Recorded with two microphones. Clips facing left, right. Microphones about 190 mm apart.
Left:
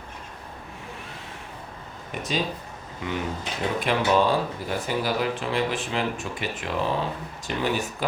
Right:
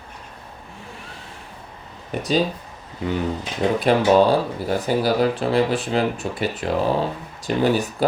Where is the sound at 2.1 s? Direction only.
35° right (ahead or behind).